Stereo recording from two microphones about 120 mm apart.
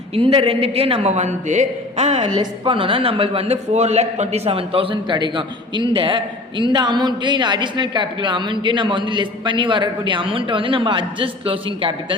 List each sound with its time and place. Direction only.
0.1 s a woman's voice: 50° right (ahead or behind)
2.3 s a woman's voice: 40° right (ahead or behind)